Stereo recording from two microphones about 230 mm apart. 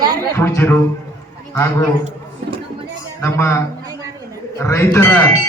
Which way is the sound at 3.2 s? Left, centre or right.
Centre.